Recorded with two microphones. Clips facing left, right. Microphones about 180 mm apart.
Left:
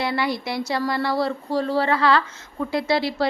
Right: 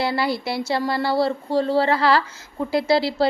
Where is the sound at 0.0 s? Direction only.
30° right (ahead or behind).